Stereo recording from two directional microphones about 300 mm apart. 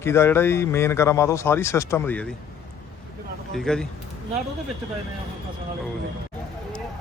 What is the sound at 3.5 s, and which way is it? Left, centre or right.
Speech, centre.